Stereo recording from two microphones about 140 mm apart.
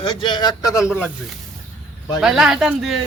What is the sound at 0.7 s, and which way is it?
Speech, 5° right (ahead or behind).